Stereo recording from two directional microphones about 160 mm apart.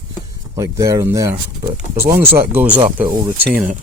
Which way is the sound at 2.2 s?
75° right (ahead or behind).